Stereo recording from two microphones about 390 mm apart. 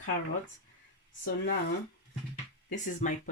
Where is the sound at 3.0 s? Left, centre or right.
Centre.